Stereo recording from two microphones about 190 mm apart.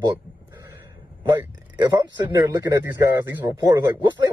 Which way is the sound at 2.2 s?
20° right (ahead or behind).